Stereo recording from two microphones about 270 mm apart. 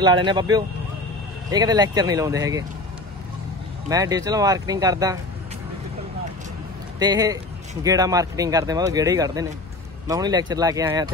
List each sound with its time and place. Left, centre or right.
0.0 s speech: centre
3.9 s speech: centre
7.0 s speech: centre